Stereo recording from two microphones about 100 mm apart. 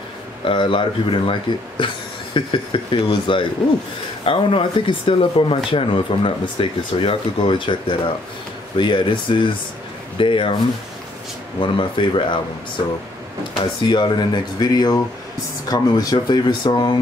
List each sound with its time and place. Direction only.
0.5 s speech: 60° left (ahead or behind)
11.6 s speech: 55° left (ahead or behind)
13.6 s speech: 50° left (ahead or behind)